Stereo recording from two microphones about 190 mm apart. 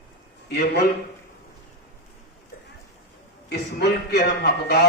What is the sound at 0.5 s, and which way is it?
Speech, 60° left (ahead or behind).